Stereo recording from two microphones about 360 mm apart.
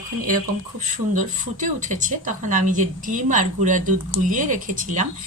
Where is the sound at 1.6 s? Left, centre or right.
Right.